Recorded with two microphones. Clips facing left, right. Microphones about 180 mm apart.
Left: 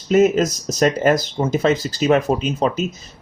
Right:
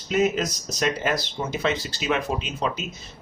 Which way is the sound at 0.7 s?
45° left (ahead or behind).